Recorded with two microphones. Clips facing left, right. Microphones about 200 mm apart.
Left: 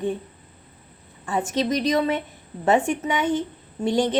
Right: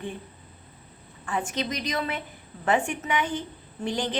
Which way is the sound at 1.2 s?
25° left (ahead or behind).